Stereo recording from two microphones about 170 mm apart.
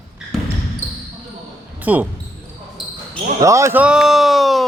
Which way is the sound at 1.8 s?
10° right (ahead or behind).